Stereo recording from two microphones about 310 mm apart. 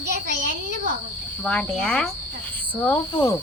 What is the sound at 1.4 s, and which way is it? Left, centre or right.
Cricket, centre.